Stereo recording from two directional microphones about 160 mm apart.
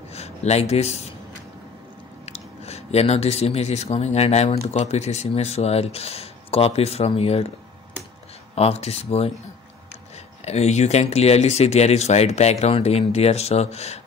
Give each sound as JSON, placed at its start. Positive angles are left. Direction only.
{"t": 0.1, "sound": "speech", "side_deg": 40}
{"t": 2.2, "sound": "speech", "side_deg": 40}
{"t": 8.5, "sound": "speech", "side_deg": 40}